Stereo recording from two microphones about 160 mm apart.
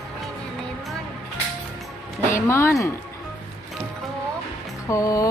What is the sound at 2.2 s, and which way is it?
Speech, 15° left (ahead or behind).